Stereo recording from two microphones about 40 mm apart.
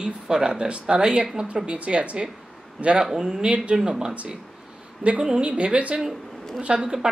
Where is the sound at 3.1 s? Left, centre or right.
Centre.